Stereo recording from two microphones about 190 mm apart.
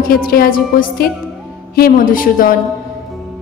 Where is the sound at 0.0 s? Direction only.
50° left (ahead or behind).